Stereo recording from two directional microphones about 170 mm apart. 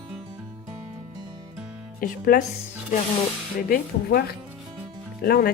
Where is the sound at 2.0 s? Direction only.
55° left (ahead or behind).